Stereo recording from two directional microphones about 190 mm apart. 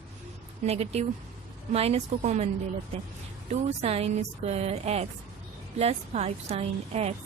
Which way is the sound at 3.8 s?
35° right (ahead or behind).